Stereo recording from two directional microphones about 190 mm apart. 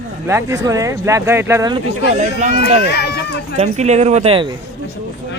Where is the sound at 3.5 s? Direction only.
35° right (ahead or behind).